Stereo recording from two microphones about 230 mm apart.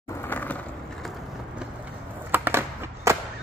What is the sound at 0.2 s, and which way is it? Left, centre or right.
Skateboard, centre.